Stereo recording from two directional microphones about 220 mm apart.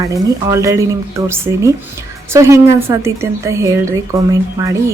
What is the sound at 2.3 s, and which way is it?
Speech, 15° right (ahead or behind).